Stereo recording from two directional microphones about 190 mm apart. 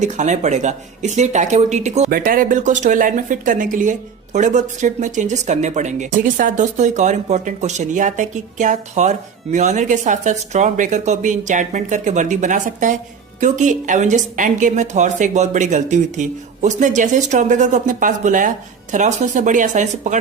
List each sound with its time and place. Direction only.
0.0 s speech: 40° right (ahead or behind)
2.0 s speech: 50° right (ahead or behind)